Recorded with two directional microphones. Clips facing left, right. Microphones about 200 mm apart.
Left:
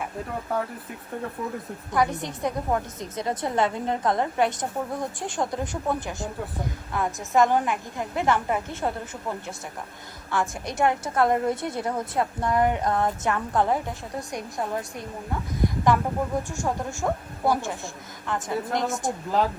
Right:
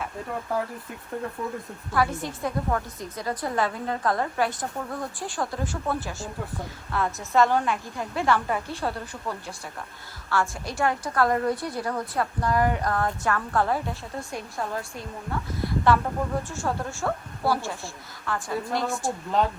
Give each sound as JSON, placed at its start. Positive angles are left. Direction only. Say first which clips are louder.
{"t": 0.5, "sound": "speech", "louder": "even", "side_deg": 0}
{"t": 1.9, "sound": "a woman's voice", "louder": "left 1 dB", "side_deg": 20}
{"t": 10.2, "sound": "a woman's voice", "louder": "even", "side_deg": 20}